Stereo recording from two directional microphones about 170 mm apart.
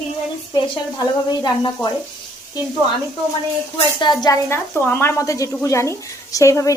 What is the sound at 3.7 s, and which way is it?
A woman's voice, 25° left (ahead or behind).